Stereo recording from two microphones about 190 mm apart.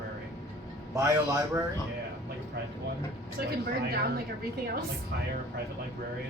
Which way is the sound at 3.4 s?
55° right (ahead or behind).